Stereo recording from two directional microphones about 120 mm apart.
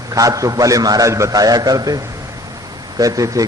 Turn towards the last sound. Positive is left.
turn(degrees=-30)  # may be behind; listen again after turning